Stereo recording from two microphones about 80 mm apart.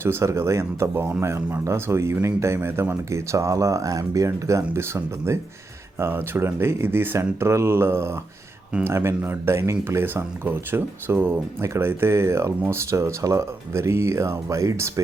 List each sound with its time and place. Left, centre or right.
0.0 s speech: right